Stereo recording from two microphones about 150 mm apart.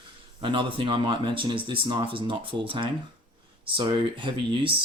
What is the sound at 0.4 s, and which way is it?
Speech, 35° right (ahead or behind).